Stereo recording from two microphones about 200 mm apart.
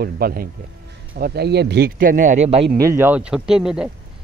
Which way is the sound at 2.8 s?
15° right (ahead or behind).